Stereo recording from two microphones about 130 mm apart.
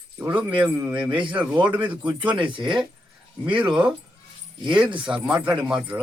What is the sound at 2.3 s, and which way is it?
Speech, 40° right (ahead or behind).